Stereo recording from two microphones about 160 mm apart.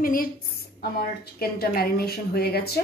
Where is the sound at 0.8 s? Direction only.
75° left (ahead or behind).